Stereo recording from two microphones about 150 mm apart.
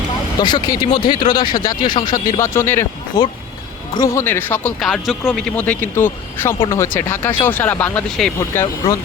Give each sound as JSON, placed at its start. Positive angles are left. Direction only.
{"t": 0.3, "sound": "speech", "side_deg": 30}
{"t": 2.4, "sound": "speech", "side_deg": 15}
{"t": 4.8, "sound": "speech", "side_deg": 0}
{"t": 8.4, "sound": "speech", "side_deg": 20}